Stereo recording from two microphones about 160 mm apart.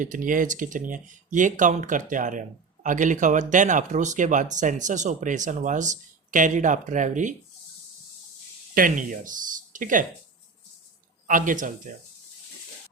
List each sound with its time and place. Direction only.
0.0 s speech: 55° right (ahead or behind)
8.7 s speech: 60° right (ahead or behind)
11.3 s speech: 55° right (ahead or behind)